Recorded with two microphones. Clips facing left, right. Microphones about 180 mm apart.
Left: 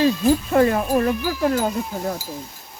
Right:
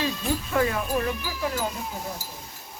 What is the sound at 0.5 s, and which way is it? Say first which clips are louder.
Speech: left 4 dB; 40° left (ahead or behind).